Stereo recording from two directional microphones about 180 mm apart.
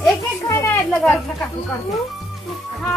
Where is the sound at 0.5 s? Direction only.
15° left (ahead or behind).